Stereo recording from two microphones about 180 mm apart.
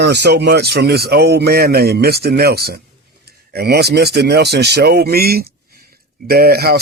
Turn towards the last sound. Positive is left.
turn(degrees=-60)  # may be behind; listen again after turning